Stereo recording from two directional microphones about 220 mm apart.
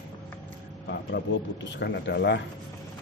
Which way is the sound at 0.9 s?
55° left (ahead or behind).